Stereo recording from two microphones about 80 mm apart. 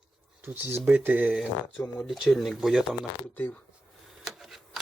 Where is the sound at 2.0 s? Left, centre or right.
Centre.